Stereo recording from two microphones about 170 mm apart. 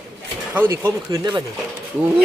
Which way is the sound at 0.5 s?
15° right (ahead or behind).